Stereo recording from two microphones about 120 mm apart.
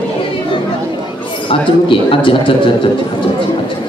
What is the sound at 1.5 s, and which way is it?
Speech, 50° left (ahead or behind).